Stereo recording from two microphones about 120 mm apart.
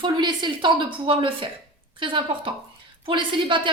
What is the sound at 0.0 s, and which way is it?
A woman's voice, 40° right (ahead or behind).